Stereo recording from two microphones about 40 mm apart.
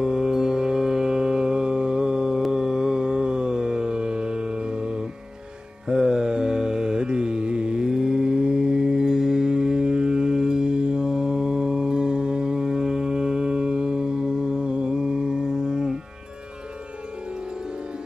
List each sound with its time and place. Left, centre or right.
0.0 s mantra: centre